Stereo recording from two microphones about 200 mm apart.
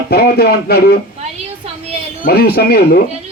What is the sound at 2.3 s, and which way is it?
Speech, 50° left (ahead or behind).